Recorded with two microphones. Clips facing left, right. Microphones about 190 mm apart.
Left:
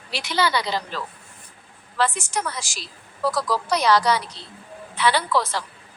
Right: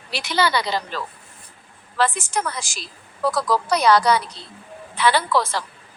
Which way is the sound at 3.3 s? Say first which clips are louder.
Right 2 dB; 55° right (ahead or behind).